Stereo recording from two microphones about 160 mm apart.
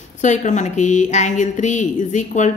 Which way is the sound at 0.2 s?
50° left (ahead or behind).